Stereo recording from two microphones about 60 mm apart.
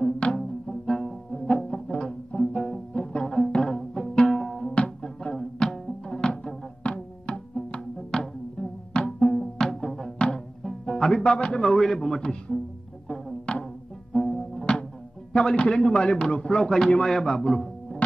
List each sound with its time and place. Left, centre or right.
0.0 s music: centre
12.2 s a man's voice: centre
13.5 s music: centre
15.3 s a man's voice: centre